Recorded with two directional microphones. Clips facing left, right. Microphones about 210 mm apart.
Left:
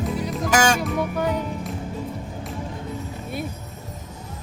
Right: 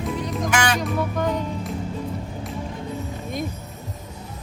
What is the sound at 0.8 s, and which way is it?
Music, 10° left (ahead or behind).